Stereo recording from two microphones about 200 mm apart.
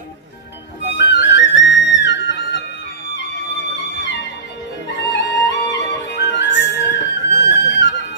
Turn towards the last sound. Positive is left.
turn(degrees=60)  # may be behind; listen again after turning